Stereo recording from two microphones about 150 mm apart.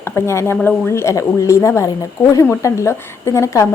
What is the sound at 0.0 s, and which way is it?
A woman's voice, 15° left (ahead or behind).